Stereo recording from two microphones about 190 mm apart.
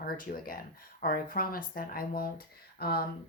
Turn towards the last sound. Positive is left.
turn(degrees=55)  # may be behind; listen again after turning